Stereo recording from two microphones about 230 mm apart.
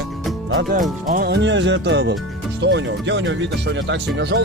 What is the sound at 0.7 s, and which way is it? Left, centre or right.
Speech, right.